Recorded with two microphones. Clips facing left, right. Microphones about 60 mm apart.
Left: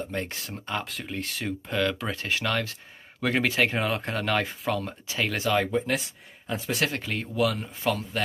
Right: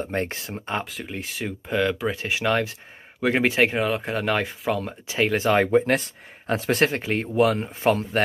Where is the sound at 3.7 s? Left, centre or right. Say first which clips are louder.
Right 3 dB; centre.